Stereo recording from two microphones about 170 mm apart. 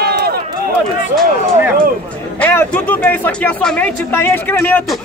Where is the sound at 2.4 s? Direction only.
10° left (ahead or behind).